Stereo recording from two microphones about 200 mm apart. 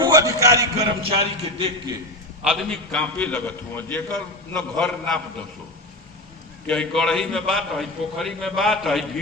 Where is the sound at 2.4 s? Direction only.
Centre (ahead or behind).